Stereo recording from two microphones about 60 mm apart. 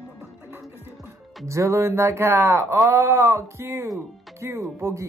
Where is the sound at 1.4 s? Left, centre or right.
Right.